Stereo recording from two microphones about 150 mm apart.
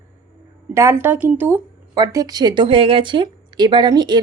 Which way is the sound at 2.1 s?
25° right (ahead or behind).